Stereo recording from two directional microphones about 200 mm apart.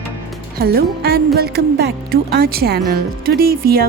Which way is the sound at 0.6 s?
50° right (ahead or behind).